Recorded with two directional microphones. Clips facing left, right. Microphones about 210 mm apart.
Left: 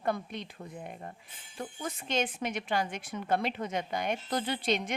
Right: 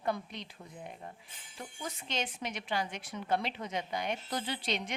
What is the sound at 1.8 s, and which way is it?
A woman's voice, 50° left (ahead or behind).